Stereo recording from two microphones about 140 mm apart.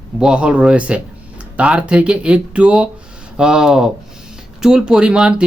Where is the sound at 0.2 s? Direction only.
5° right (ahead or behind).